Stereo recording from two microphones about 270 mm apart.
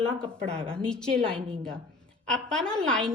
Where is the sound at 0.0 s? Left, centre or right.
Centre.